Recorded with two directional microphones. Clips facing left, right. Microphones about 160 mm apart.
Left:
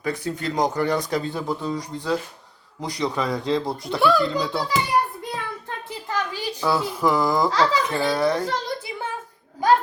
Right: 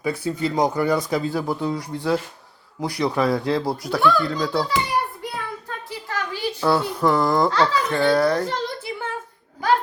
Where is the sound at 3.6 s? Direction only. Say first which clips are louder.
Right 3 dB; 5° right (ahead or behind).